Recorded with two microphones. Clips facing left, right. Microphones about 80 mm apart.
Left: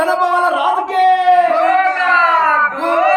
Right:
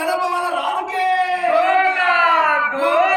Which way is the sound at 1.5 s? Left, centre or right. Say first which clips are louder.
Left 3 dB; centre.